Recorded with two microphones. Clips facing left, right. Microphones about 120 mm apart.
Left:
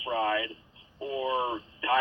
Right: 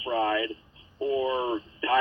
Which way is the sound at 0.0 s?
30° right (ahead or behind).